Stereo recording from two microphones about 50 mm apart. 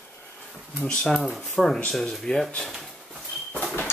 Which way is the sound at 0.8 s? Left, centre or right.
Centre.